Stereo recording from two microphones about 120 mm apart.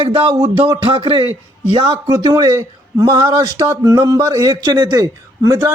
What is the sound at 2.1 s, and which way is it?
A man's voice, 30° right (ahead or behind).